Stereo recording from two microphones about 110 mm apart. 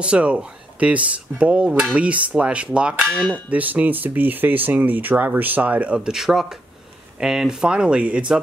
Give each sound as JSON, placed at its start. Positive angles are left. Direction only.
{"t": 0.0, "sound": "speech", "side_deg": -10}
{"t": 3.0, "sound": "speech", "side_deg": 5}
{"t": 3.4, "sound": "speech", "side_deg": -15}